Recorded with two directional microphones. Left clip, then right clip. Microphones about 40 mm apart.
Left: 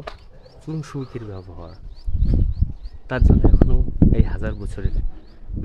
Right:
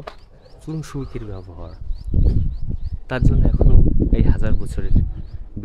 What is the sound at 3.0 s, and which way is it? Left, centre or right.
Speech, right.